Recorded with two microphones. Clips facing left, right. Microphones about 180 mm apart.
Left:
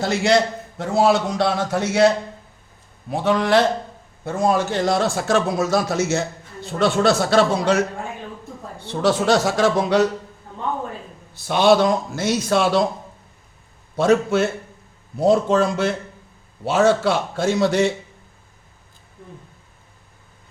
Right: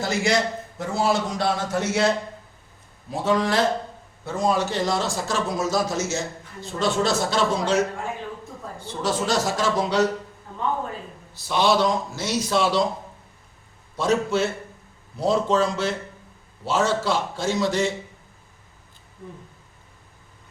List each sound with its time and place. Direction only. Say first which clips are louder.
0.0 s a man's voice: left 5 dB; 65° left (ahead or behind)
3.1 s a man's voice: left 4 dB; 65° left (ahead or behind)
4.3 s a man's voice: left 3 dB; 50° left (ahead or behind)
8.8 s a man's voice: left 6 dB; 65° left (ahead or behind)
11.3 s a man's voice: left 5 dB; 55° left (ahead or behind)
13.9 s a man's voice: left 5 dB; 55° left (ahead or behind)